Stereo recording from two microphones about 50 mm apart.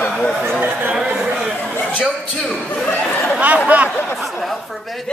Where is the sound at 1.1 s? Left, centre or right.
Centre.